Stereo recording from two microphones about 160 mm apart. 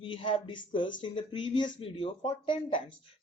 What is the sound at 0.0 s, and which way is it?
Speech, 35° left (ahead or behind).